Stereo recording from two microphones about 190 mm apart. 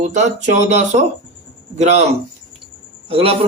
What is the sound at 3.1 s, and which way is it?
Speech, 30° right (ahead or behind).